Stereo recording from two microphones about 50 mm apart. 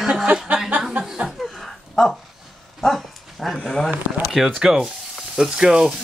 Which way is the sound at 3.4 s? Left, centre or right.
Centre.